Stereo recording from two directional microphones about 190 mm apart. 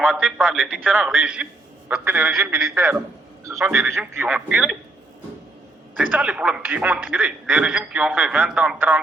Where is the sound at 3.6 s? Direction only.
5° right (ahead or behind).